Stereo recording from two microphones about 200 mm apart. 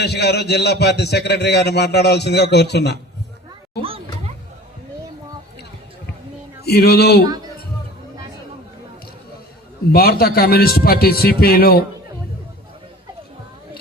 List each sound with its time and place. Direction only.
0.0 s a man's voice: 55° left (ahead or behind)
6.7 s a man's voice: 50° left (ahead or behind)
9.9 s a man's voice: 50° left (ahead or behind)